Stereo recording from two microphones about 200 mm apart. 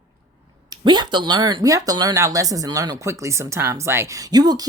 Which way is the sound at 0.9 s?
20° right (ahead or behind).